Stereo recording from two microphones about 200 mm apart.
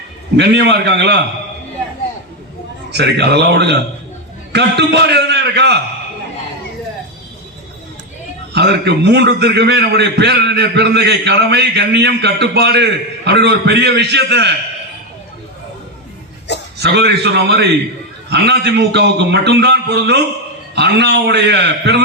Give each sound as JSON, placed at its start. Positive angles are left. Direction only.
{"t": 0.3, "sound": "a man's voice", "side_deg": -55}
{"t": 2.9, "sound": "a man's voice", "side_deg": -55}
{"t": 8.5, "sound": "a man's voice", "side_deg": -60}
{"t": 16.7, "sound": "a man's voice", "side_deg": -55}